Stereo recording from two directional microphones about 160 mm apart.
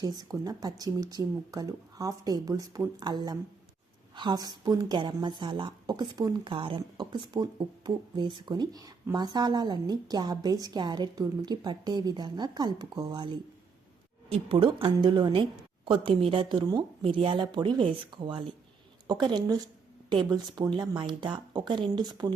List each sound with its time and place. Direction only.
0.0 s speech: 25° right (ahead or behind)